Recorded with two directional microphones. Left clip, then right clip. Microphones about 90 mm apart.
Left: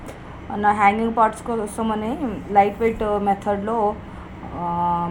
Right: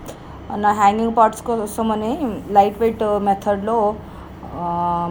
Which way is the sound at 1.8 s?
20° right (ahead or behind).